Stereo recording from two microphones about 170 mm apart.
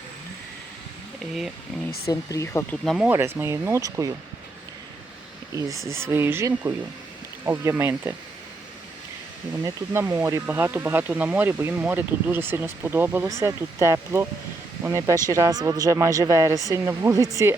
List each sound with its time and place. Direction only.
2.0 s speech: 15° left (ahead or behind)
2.8 s speech: centre (ahead or behind)
3.1 s speech: 15° right (ahead or behind)
5.5 s speech: 20° right (ahead or behind)
9.6 s speech: 15° right (ahead or behind)